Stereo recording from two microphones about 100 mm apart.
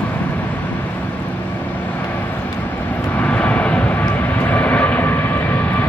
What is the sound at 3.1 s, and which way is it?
Vehicle, 15° left (ahead or behind).